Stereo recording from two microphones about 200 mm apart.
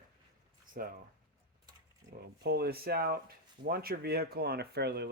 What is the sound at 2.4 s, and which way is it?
Speech, 55° right (ahead or behind).